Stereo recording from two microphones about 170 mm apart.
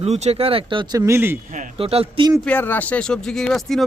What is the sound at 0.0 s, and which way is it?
Speech, 40° right (ahead or behind).